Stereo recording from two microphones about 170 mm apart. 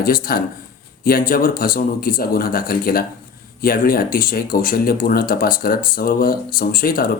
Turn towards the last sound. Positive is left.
turn(degrees=60)  # may be behind; listen again after turning